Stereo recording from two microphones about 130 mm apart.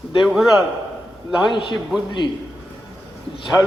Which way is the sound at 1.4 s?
35° left (ahead or behind).